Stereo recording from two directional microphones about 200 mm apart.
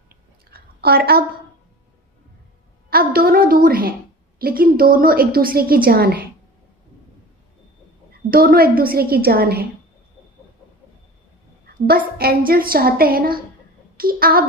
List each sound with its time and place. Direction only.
0.1 s chewing: 50° right (ahead or behind)
2.9 s a sound: 50° right (ahead or behind)
3.6 s a woman's voice: 45° right (ahead or behind)
8.3 s a woman's voice: 45° right (ahead or behind)
11.6 s a woman's voice: 50° right (ahead or behind)